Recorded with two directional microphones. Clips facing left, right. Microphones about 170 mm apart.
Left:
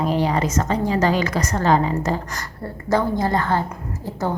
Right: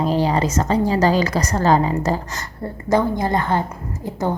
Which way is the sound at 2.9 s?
15° right (ahead or behind).